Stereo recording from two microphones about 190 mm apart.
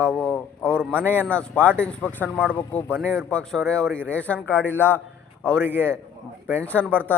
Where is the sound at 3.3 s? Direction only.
5° left (ahead or behind).